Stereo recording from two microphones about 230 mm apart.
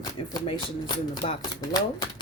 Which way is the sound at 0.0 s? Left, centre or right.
Left.